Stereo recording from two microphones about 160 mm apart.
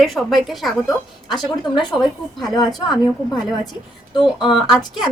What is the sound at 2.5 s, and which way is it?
Speech, 25° left (ahead or behind).